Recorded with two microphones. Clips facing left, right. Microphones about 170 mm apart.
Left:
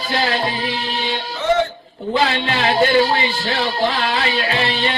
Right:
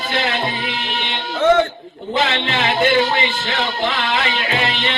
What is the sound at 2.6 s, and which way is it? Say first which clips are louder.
Speech: left 2 dB; 35° left (ahead or behind).